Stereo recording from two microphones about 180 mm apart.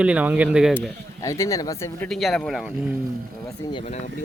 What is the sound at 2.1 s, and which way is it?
Speech, centre (ahead or behind).